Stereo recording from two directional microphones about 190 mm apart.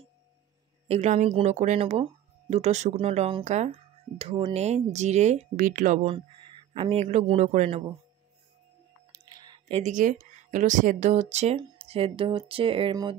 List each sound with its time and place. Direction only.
0.8 s speech: 35° right (ahead or behind)
6.0 s a man's voice: 25° right (ahead or behind)
9.1 s a sound: 20° right (ahead or behind)
9.7 s speech: 35° right (ahead or behind)